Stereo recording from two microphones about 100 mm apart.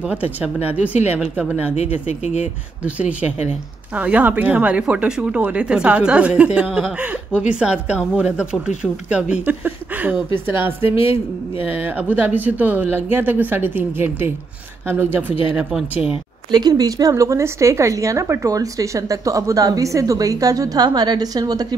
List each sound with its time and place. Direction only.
0.1 s speech: 15° right (ahead or behind)
2.8 s speech: 15° right (ahead or behind)
10.8 s a woman's voice: 70° left (ahead or behind)
11.8 s speech: 15° right (ahead or behind)
16.5 s a woman's voice: 40° right (ahead or behind)